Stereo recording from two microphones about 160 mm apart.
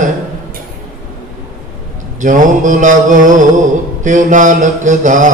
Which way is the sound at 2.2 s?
55° right (ahead or behind).